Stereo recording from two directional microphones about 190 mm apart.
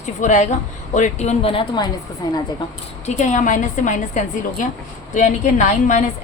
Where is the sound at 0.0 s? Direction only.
40° left (ahead or behind); by 2.4 s 20° left (ahead or behind).